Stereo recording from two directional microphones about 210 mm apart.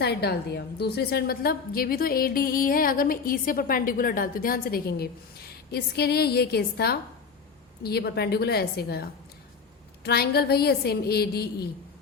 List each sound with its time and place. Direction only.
0.0 s a woman's voice: 50° left (ahead or behind)